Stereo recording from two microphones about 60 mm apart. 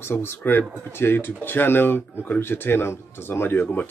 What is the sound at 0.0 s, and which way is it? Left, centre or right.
Speech, left.